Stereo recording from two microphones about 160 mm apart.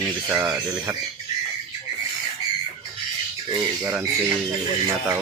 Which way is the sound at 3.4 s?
15° right (ahead or behind).